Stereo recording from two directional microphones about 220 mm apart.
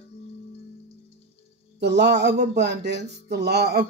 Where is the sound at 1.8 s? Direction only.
50° right (ahead or behind).